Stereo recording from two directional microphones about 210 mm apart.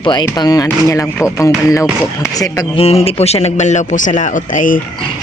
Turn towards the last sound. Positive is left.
turn(degrees=40)  # may be behind; listen again after turning